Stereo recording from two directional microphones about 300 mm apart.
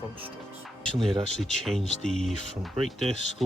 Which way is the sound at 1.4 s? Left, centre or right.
Centre.